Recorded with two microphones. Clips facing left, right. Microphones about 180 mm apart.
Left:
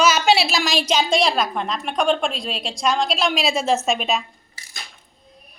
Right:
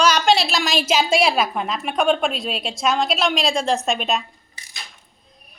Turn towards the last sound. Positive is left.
turn(degrees=-20)  # may be behind; listen again after turning